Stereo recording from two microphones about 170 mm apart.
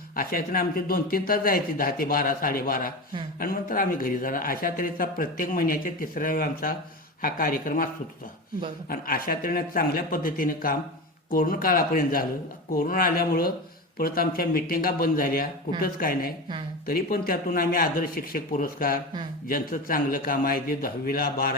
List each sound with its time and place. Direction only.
0.2 s a man's voice: 60° left (ahead or behind)
8.9 s a man's voice: 55° left (ahead or behind)